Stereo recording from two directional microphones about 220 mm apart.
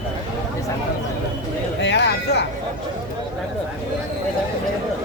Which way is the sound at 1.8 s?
50° left (ahead or behind).